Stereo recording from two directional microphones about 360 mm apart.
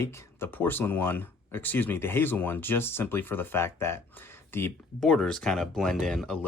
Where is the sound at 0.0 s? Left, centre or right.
Centre.